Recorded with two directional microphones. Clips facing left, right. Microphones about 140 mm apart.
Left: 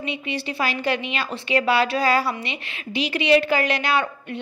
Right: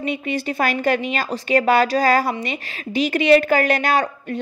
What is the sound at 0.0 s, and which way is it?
A woman's voice, 45° right (ahead or behind).